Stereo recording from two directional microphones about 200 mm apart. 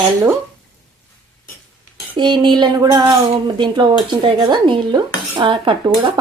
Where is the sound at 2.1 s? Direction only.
25° right (ahead or behind).